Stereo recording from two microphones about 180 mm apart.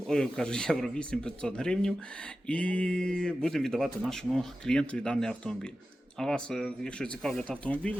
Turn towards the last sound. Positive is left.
turn(degrees=5)  # may be behind; listen again after turning